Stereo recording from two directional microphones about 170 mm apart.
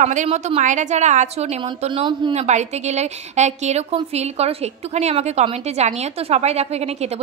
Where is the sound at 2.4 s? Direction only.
40° right (ahead or behind).